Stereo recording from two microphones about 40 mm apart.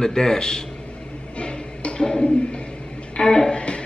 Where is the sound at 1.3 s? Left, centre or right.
Left.